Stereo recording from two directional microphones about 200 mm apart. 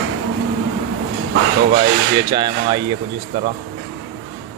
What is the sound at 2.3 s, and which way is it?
Speech, 20° right (ahead or behind).